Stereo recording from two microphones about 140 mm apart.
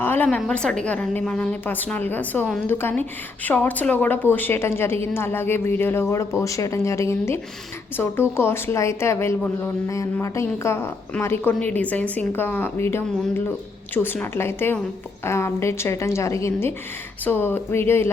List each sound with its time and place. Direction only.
0.0 s a woman's voice: 15° left (ahead or behind)